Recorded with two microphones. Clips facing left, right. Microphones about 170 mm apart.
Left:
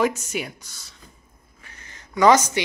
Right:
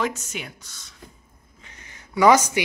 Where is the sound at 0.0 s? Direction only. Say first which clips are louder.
Left 5 dB; 10° left (ahead or behind).